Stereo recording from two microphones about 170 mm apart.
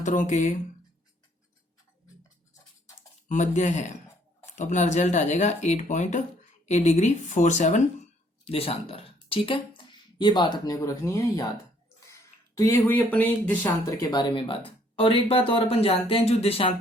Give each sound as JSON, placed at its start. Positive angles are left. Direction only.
{"t": 0.0, "sound": "speech", "side_deg": 45}
{"t": 3.2, "sound": "speech", "side_deg": 45}
{"t": 13.6, "sound": "speech", "side_deg": 25}